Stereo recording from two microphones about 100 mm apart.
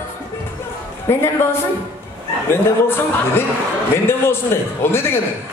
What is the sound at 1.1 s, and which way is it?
Speech, 25° left (ahead or behind).